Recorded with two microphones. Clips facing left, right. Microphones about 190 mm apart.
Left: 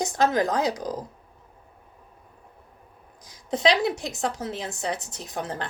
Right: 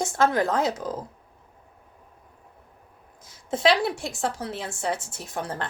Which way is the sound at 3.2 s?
15° left (ahead or behind).